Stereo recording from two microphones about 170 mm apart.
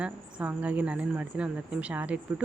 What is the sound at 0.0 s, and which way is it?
A woman's voice, 5° right (ahead or behind).